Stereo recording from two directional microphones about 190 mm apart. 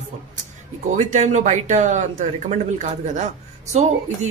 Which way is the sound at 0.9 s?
40° right (ahead or behind).